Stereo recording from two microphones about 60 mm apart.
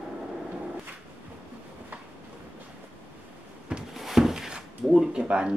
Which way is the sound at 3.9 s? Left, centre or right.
Centre.